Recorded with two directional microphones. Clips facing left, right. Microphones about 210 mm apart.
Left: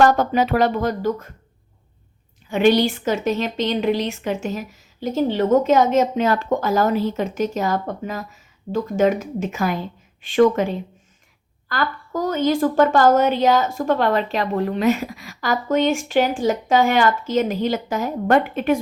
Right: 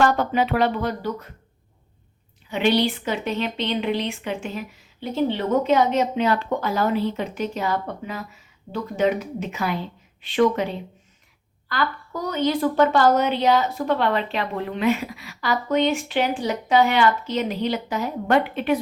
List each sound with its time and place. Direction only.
0.0 s a woman's voice: 45° left (ahead or behind)
2.5 s a woman's voice: 45° left (ahead or behind)
11.7 s a woman's voice: 45° left (ahead or behind)